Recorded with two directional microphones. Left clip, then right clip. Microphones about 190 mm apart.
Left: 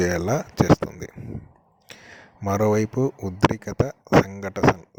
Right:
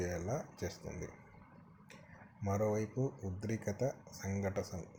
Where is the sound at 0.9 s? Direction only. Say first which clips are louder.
Left 9 dB; 55° left (ahead or behind).